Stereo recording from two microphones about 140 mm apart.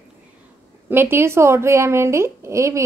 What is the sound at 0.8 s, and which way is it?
A woman's voice, 15° right (ahead or behind).